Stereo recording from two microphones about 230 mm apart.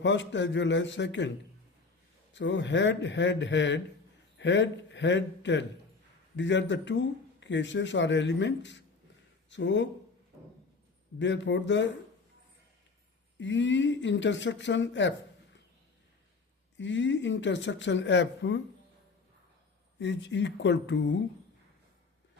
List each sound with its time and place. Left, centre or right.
0.0 s speech: left
2.3 s a man's voice: left
11.2 s speech: left
13.4 s speech: left
16.7 s speech: left
20.0 s speech: left